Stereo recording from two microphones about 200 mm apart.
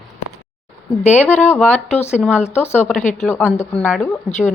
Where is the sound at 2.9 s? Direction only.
40° left (ahead or behind).